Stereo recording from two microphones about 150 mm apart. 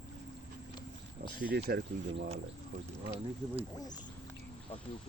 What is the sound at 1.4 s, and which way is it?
Speech, 80° right.